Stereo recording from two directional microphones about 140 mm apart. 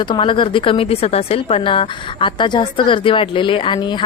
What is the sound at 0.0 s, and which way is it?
Speech, 35° left (ahead or behind).